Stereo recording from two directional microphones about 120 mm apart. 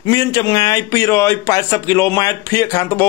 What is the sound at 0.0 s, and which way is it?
A man's voice, 30° left (ahead or behind).